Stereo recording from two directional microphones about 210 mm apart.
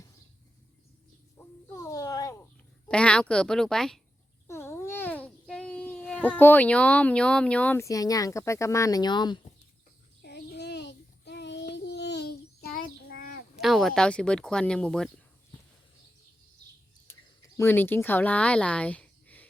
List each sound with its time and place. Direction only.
1.6 s a sound: 15° left (ahead or behind)
2.9 s a child's voice: 5° left (ahead or behind); by 9.4 s 20° left (ahead or behind)
10.2 s child singing: 50° left (ahead or behind)
13.6 s speech: centre (ahead or behind)
17.1 s a sound: 10° left (ahead or behind)
17.6 s speech: 10° left (ahead or behind)